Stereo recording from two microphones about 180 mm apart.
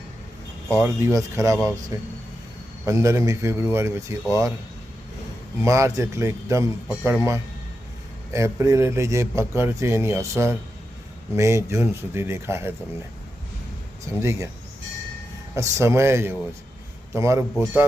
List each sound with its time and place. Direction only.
0.7 s speech: 15° right (ahead or behind)
5.6 s speech: 15° right (ahead or behind)
14.2 s speech: 15° right (ahead or behind)
15.5 s speech: 15° right (ahead or behind)